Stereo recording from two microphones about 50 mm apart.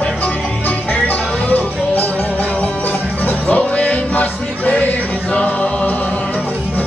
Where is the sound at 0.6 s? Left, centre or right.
Left.